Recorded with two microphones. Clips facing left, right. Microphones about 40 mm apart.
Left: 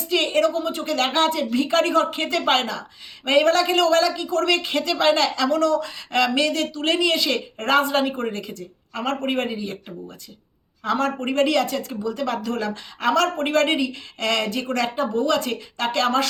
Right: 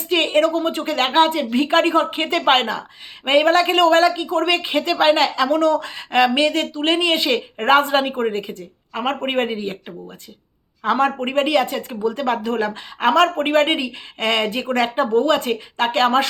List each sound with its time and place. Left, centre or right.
0.1 s a woman's voice: right